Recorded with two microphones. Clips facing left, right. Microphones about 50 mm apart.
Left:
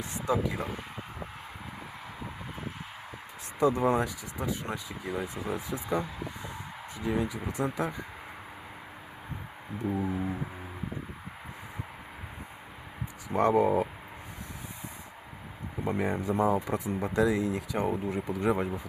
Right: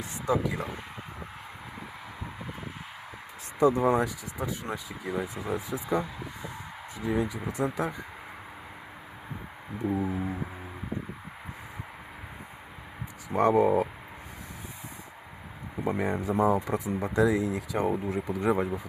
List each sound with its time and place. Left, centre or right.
0.0 s speech: centre
3.6 s speech: centre
9.8 s speech: centre
13.3 s speech: centre
15.8 s speech: centre
17.3 s speech: right
17.7 s speech: centre